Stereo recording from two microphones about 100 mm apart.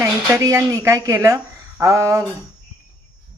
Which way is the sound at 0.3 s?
35° right (ahead or behind).